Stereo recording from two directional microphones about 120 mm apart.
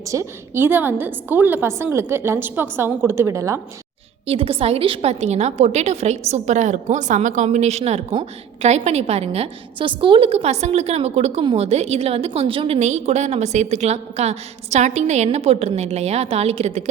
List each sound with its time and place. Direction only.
0.0 s a woman's voice: 25° right (ahead or behind)
4.3 s a woman's voice: 55° right (ahead or behind); by 16.9 s 70° right (ahead or behind)